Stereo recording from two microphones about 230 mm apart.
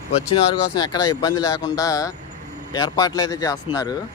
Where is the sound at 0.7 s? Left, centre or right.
Centre.